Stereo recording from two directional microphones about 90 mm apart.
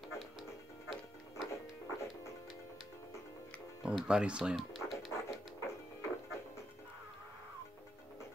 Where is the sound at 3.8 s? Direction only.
5° right (ahead or behind).